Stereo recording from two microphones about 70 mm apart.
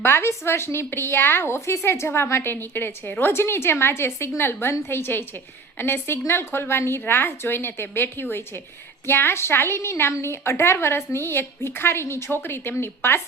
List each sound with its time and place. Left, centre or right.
0.0 s a woman's voice: left